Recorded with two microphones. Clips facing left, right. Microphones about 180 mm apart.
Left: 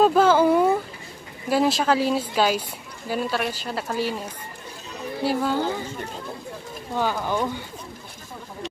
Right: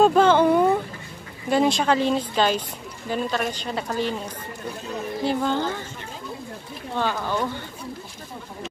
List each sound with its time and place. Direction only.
0.0 s a sound: 5° left (ahead or behind)
1.5 s speech: 5° left (ahead or behind)
5.2 s speech: 5° left (ahead or behind)
7.0 s speech: 10° left (ahead or behind)